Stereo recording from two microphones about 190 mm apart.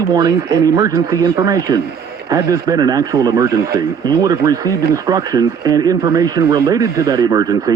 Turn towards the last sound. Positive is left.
turn(degrees=-20)  # may be behind; listen again after turning